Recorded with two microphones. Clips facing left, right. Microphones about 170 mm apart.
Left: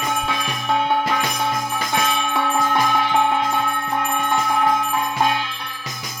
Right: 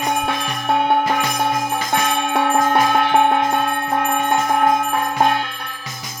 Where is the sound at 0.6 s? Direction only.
55° right (ahead or behind).